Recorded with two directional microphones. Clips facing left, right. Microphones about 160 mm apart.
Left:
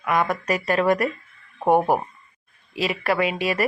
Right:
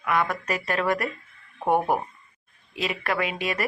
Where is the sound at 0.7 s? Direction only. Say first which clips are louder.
Left 6 dB; 20° left (ahead or behind).